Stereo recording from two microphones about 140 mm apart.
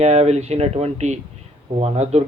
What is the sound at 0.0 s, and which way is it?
Speech, 50° right (ahead or behind).